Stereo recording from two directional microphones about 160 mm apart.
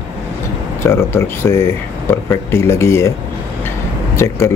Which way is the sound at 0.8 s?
15° left (ahead or behind).